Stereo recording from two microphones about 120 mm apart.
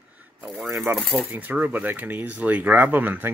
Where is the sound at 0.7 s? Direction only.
20° right (ahead or behind).